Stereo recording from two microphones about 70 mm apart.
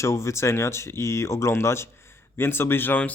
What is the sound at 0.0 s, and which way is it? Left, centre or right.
Speech, left.